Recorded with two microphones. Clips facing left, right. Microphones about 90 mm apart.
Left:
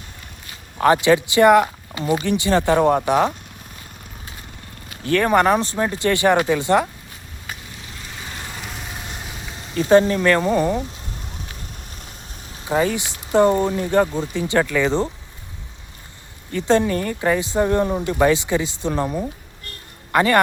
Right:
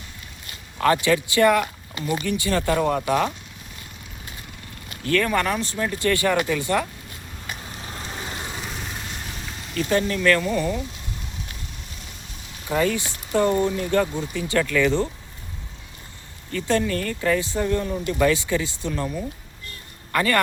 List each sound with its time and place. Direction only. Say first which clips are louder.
0.8 s speech: left 4 dB; 25° left (ahead or behind)
5.2 s speech: left 7 dB; 30° left (ahead or behind)
7.8 s vehicle: right 3 dB; 35° right (ahead or behind)
8.6 s vehicle: even; 5° left (ahead or behind)
9.8 s speech: left 8 dB; 25° left (ahead or behind)
12.6 s speech: left 2 dB; 25° left (ahead or behind)
16.5 s speech: left 5 dB; 25° left (ahead or behind)
17.7 s speech: left 5 dB; 40° left (ahead or behind)
18.3 s speech: left 3 dB; 25° left (ahead or behind)